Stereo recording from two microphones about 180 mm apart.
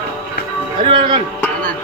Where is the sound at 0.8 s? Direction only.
25° right (ahead or behind).